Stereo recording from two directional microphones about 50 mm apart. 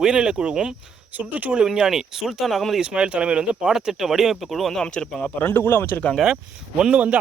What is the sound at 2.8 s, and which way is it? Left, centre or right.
Speech, centre.